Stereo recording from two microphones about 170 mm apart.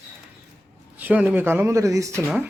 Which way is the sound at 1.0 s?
10° right (ahead or behind).